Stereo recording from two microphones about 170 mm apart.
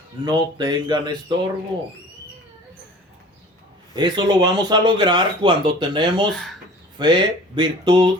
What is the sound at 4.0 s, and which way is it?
Speech, 25° right (ahead or behind).